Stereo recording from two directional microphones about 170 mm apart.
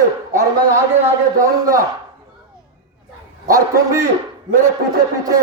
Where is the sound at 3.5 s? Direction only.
20° right (ahead or behind).